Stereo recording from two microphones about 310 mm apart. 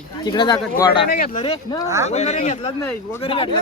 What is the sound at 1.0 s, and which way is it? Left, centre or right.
Speech, left.